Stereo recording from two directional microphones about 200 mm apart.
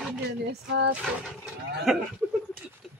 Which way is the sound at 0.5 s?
55° right (ahead or behind).